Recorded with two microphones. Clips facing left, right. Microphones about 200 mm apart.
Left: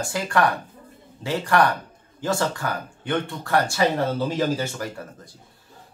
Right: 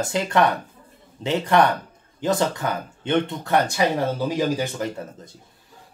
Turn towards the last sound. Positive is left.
turn(degrees=-20)  # may be behind; listen again after turning